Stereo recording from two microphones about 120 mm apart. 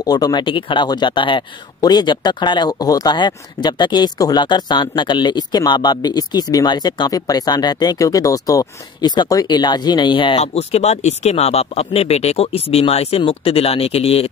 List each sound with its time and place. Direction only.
0.0 s speech: 30° left (ahead or behind)
10.4 s speech: 60° left (ahead or behind)